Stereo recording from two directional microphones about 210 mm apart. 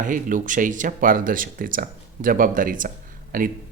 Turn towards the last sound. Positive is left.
turn(degrees=-40)  # may be behind; listen again after turning